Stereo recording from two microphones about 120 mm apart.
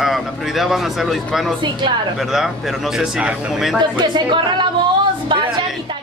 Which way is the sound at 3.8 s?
40° right (ahead or behind).